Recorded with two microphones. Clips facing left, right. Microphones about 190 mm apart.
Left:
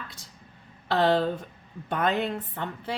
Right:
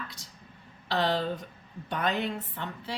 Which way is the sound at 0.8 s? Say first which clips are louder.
Left 5 dB; 50° left (ahead or behind).